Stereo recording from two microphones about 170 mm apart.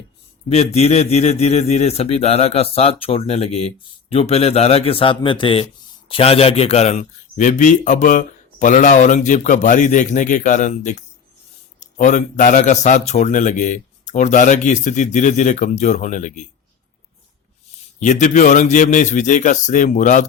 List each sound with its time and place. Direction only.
0.5 s a man's voice: 40° left (ahead or behind)
18.0 s a man's voice: 45° left (ahead or behind)